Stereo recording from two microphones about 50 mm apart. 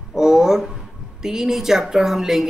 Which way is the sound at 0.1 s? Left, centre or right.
Centre.